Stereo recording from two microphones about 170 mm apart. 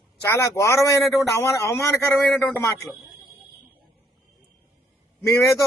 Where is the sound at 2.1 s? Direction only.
Centre (ahead or behind).